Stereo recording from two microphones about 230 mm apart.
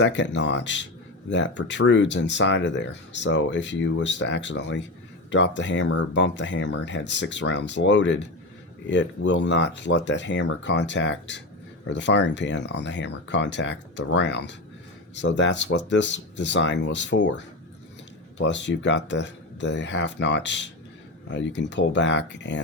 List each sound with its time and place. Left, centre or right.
0.0 s speech: left